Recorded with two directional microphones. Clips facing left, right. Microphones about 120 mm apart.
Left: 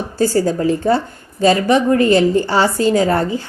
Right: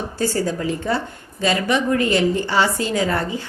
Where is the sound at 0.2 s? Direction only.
35° left (ahead or behind).